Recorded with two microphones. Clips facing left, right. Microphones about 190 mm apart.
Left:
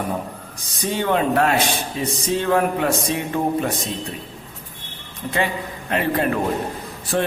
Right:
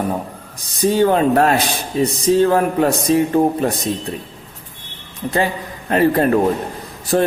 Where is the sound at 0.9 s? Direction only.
40° right (ahead or behind).